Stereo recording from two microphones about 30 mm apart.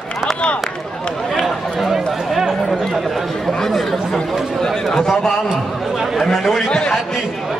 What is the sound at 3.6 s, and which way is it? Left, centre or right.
Speech, centre.